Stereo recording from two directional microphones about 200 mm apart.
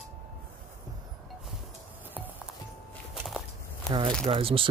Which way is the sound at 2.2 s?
10° right (ahead or behind).